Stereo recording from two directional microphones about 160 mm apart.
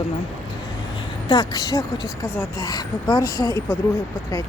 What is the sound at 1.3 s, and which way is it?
Speech, 25° left (ahead or behind).